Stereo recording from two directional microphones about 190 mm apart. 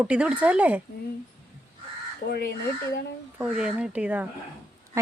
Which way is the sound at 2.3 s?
55° left (ahead or behind).